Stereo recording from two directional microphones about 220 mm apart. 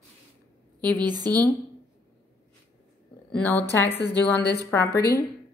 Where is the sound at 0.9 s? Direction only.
20° right (ahead or behind).